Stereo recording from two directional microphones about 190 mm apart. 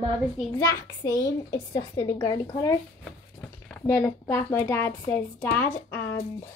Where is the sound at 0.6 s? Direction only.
20° left (ahead or behind).